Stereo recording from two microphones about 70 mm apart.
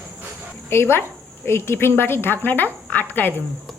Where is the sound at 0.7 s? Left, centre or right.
Left.